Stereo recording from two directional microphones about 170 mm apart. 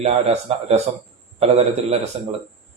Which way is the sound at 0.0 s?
40° right (ahead or behind).